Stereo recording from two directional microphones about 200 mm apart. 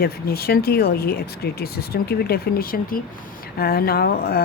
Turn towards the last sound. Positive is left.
turn(degrees=50)  # may be behind; listen again after turning